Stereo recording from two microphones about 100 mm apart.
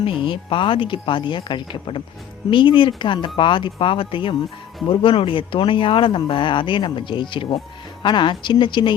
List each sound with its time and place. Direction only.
0.0 s speech: 55° left (ahead or behind)